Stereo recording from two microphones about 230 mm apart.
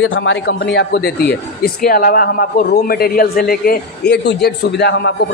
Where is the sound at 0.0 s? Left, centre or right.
Left.